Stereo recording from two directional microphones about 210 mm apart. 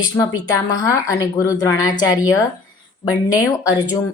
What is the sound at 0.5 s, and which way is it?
Speech, 15° left (ahead or behind).